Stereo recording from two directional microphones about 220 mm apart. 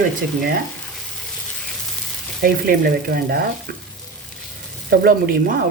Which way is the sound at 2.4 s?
45° right (ahead or behind).